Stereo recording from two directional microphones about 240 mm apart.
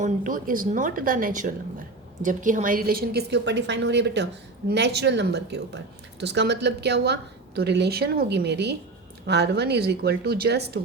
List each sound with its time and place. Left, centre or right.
0.0 s a woman's voice: right